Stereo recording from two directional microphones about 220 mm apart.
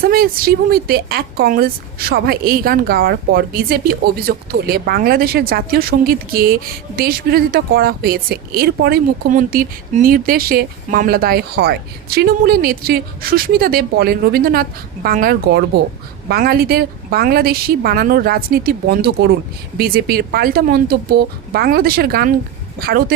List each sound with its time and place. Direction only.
0.0 s speech: 40° right (ahead or behind)